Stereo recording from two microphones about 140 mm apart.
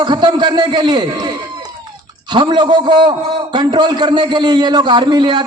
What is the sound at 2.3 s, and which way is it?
A man's voice, 35° right (ahead or behind).